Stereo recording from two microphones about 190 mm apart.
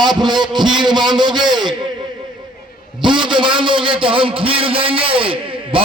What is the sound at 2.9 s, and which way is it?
A man's voice, 25° right (ahead or behind).